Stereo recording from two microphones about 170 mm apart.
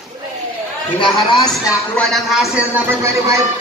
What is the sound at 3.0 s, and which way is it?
Speech, 20° right (ahead or behind).